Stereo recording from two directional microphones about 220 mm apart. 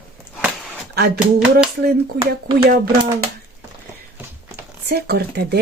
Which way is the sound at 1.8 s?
45° right (ahead or behind).